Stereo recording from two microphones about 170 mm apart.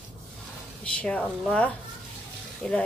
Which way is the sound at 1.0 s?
5° left (ahead or behind).